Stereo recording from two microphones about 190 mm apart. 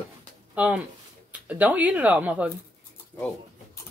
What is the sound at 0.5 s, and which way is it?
Speech, 5° right (ahead or behind).